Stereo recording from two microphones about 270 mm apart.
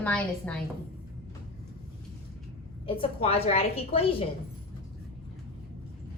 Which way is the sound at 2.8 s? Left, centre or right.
Centre.